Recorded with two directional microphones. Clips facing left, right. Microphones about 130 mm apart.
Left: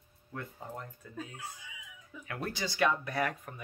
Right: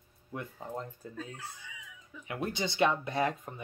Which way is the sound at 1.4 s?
5° left (ahead or behind).